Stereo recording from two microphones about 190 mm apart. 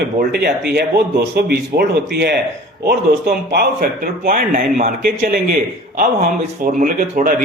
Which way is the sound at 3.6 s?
50° right (ahead or behind).